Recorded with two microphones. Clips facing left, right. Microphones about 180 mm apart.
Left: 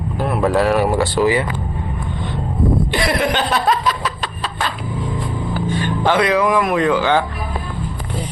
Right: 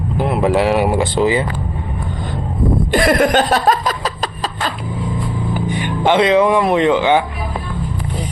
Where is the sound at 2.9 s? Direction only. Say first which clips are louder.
Right 5 dB; 45° right (ahead or behind).